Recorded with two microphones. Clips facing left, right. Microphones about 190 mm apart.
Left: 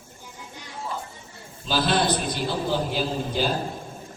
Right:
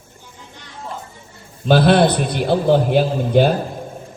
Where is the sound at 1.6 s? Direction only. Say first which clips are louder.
Right 10 dB; 60° right (ahead or behind).